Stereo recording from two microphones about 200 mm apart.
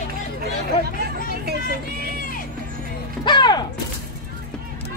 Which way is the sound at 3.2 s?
20° left (ahead or behind).